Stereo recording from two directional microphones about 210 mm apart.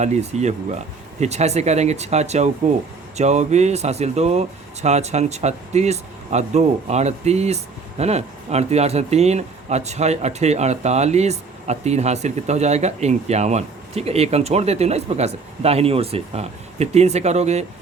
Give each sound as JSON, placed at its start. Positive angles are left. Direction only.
{"t": 0.0, "sound": "speech", "side_deg": -30}